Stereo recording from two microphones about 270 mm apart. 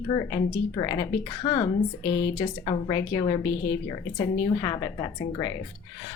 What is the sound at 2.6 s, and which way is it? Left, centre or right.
Speech, centre.